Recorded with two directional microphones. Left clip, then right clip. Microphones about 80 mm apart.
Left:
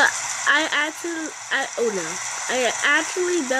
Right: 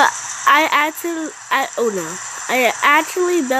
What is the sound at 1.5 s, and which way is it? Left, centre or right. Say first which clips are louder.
Speech: right 5 dB; right.